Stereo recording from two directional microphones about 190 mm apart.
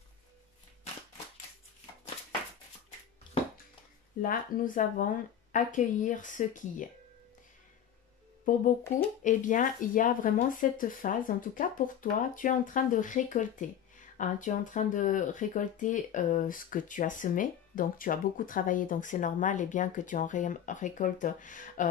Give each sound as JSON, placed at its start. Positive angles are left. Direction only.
{"t": 4.2, "sound": "speech", "side_deg": 45}
{"t": 9.2, "sound": "speech", "side_deg": 40}